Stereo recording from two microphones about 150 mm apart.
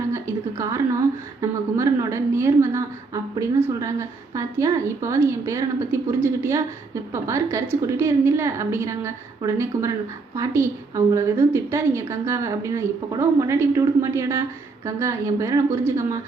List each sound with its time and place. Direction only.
0.1 s a woman's voice: 20° right (ahead or behind)